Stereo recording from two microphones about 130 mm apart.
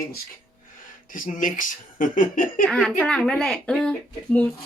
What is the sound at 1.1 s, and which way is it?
Speech, 90° left.